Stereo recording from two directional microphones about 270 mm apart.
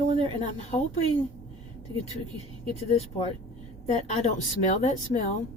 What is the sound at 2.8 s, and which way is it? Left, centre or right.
A woman's voice, left.